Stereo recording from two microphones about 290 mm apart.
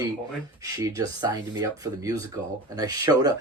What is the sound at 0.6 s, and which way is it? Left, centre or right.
Speech, centre.